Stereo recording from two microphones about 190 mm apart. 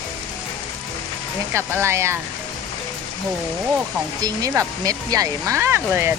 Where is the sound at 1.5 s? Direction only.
15° right (ahead or behind).